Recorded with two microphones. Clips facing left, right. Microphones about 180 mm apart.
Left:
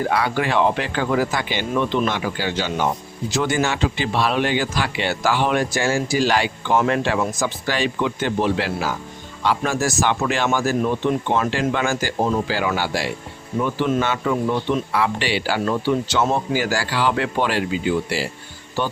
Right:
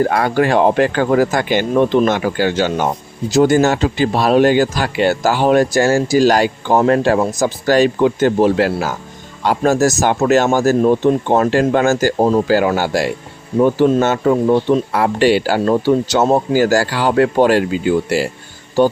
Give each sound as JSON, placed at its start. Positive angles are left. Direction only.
{"t": 0.0, "sound": "speech", "side_deg": -45}